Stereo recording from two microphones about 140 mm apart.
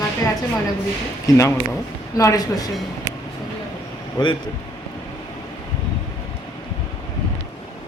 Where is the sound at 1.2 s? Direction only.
25° left (ahead or behind).